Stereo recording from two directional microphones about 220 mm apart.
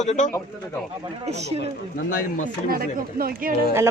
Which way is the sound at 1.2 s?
30° right (ahead or behind).